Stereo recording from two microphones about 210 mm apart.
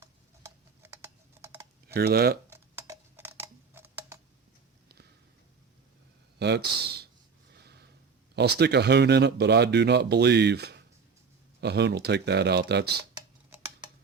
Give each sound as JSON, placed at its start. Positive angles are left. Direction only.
{"t": 0.0, "sound": "typing", "side_deg": -15}
{"t": 1.9, "sound": "speech", "side_deg": -50}
{"t": 2.5, "sound": "tick-tock", "side_deg": -15}
{"t": 6.4, "sound": "speech", "side_deg": -50}
{"t": 7.5, "sound": "snort", "side_deg": -50}
{"t": 8.4, "sound": "speech", "side_deg": -50}